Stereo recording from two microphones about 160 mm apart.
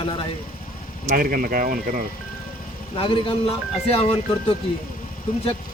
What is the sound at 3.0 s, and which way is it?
Speech, 35° left (ahead or behind).